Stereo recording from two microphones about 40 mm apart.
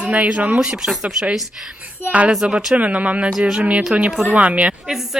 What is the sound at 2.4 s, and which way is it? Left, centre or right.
Speech, right.